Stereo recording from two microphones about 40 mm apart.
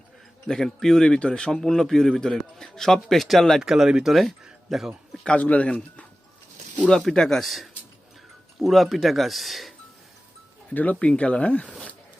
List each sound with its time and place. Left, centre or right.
0.4 s speech: centre
3.6 s speech: centre
4.1 s speech: centre
5.4 s speech: left
5.6 s speech: left
7.1 s speech: centre
7.4 s speech: centre
10.7 s speech: left
11.0 s speech: left